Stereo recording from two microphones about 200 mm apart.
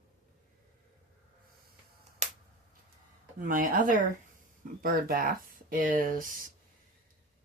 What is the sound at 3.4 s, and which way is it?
Speech, 40° right (ahead or behind).